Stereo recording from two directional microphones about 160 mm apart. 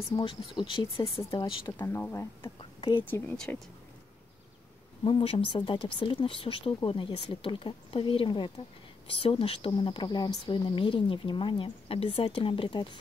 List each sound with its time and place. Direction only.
0.1 s speech: 30° left (ahead or behind)
1.7 s speech: 15° left (ahead or behind)
2.8 s a woman's voice: 30° left (ahead or behind)
3.1 s speech: 10° left (ahead or behind)
5.0 s speech: 35° left (ahead or behind)